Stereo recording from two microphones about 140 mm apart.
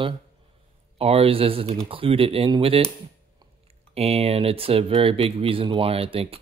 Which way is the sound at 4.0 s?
45° right (ahead or behind).